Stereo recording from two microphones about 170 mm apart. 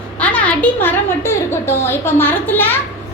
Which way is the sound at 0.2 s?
5° left (ahead or behind).